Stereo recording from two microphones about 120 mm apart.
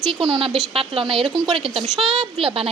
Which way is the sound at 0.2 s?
45° right (ahead or behind).